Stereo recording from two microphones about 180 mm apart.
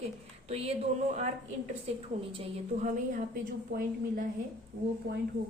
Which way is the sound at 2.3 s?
35° right (ahead or behind).